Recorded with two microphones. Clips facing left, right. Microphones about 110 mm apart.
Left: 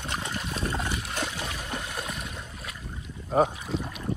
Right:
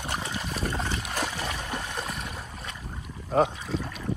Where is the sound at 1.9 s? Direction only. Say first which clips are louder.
Right 1 dB; centre (ahead or behind).